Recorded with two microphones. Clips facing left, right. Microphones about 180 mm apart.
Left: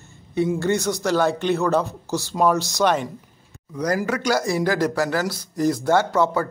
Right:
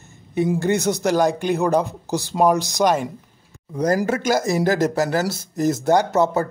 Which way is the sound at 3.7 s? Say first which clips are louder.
Right 3 dB; 30° right (ahead or behind).